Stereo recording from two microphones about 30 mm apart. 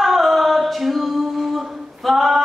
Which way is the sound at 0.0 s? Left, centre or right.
Centre.